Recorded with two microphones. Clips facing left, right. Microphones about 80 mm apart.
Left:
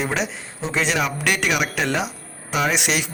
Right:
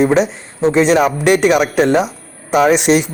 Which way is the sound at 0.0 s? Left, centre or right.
Right.